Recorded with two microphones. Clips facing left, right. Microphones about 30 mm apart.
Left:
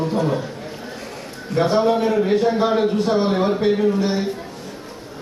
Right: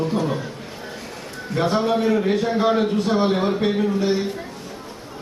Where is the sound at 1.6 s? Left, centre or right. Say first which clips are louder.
Left 3 dB; left.